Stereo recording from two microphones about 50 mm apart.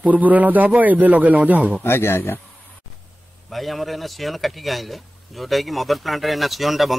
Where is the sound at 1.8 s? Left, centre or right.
Left.